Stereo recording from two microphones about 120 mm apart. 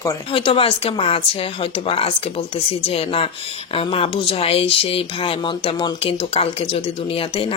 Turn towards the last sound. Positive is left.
turn(degrees=50)  # may be behind; listen again after turning